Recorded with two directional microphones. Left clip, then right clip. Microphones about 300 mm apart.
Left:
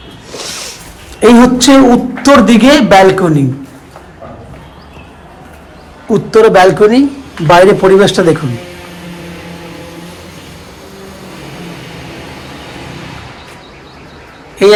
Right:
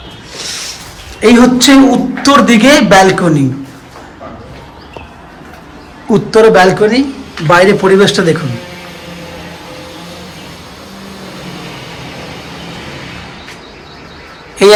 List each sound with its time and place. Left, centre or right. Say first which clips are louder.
0.3 s a sound: right 1 dB; centre
1.2 s a man's voice: left 1 dB; centre
6.1 s a man's voice: even; centre
14.6 s a man's voice: right 1 dB; centre